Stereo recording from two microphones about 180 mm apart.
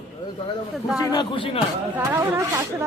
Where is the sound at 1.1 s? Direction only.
25° left (ahead or behind).